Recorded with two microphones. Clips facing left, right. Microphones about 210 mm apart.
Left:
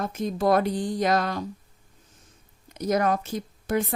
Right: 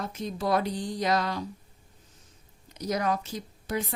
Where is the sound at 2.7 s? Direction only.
55° left (ahead or behind).